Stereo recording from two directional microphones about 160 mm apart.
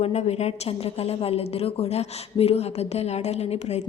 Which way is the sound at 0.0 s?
40° left (ahead or behind).